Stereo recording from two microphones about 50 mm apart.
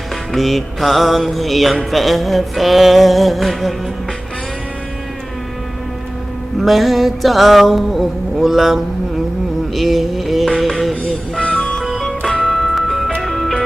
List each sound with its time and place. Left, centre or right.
0.3 s music: centre
6.6 s music: centre
11.3 s music: centre